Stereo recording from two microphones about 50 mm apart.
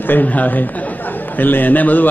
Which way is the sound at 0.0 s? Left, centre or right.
Left.